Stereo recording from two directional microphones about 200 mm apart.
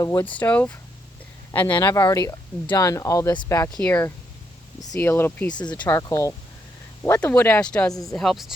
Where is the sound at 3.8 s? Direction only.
5° left (ahead or behind).